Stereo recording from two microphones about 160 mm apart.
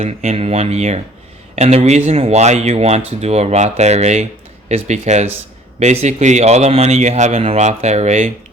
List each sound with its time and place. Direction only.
0.0 s speech: 40° right (ahead or behind)